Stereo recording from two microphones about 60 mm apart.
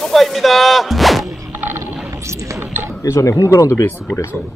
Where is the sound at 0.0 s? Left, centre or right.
Centre.